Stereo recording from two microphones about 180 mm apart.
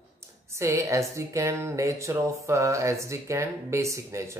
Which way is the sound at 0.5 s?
15° right (ahead or behind).